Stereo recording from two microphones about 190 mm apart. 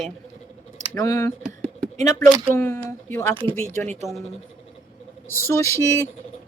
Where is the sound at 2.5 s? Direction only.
10° left (ahead or behind).